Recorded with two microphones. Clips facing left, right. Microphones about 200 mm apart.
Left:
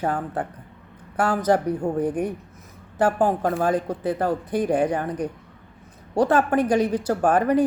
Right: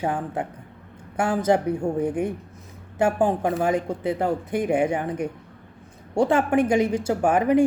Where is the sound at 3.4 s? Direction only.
10° right (ahead or behind).